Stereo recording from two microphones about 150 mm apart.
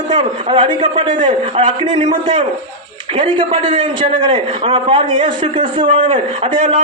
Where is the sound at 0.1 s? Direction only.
35° right (ahead or behind).